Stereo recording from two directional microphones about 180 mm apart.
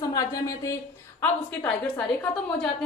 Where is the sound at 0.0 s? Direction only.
20° left (ahead or behind).